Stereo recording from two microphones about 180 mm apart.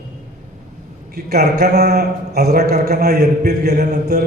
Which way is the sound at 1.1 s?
60° right (ahead or behind).